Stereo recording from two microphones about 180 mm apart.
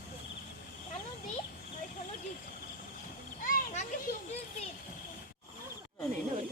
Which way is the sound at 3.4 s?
45° left (ahead or behind).